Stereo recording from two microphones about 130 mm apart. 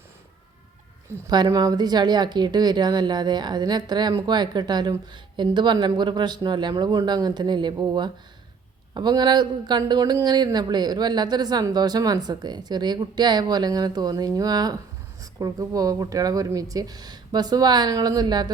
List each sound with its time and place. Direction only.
1.3 s a woman's voice: 30° right (ahead or behind)